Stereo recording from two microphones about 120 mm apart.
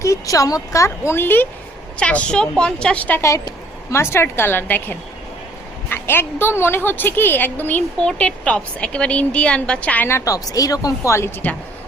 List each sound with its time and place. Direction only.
0.0 s a woman's voice: 25° left (ahead or behind)
3.2 s a woman's voice: 25° left (ahead or behind)